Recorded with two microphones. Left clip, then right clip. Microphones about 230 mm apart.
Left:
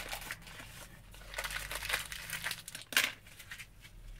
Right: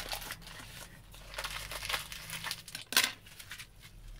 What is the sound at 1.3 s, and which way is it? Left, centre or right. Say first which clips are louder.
Crumpling: left 1 dB; centre.